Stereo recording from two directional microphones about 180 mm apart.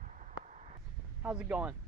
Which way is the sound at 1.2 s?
5° right (ahead or behind).